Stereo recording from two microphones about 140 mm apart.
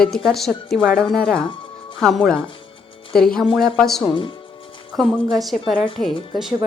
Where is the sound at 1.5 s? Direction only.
35° left (ahead or behind).